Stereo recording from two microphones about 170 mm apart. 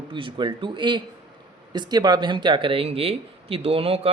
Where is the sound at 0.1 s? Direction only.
30° right (ahead or behind).